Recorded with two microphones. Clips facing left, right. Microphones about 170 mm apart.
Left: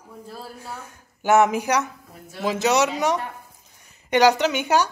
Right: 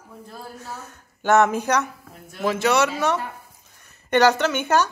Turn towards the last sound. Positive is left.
turn(degrees=10)  # may be behind; listen again after turning